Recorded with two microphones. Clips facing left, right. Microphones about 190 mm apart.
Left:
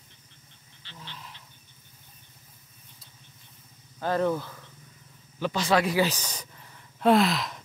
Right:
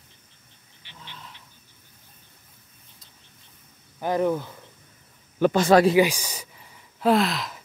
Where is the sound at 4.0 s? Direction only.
15° right (ahead or behind).